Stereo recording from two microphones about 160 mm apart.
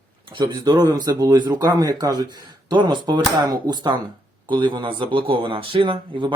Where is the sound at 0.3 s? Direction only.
25° right (ahead or behind).